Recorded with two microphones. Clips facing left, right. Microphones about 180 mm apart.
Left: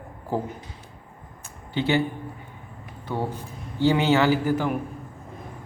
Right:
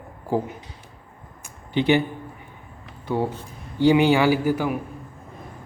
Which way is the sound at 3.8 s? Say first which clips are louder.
Right 3 dB; 15° right (ahead or behind).